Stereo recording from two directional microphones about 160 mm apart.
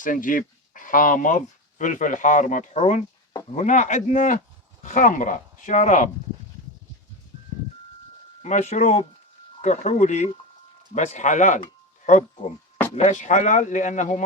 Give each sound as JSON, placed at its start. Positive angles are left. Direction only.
{"t": 0.0, "sound": "speech", "side_deg": 60}
{"t": 8.4, "sound": "speech", "side_deg": 45}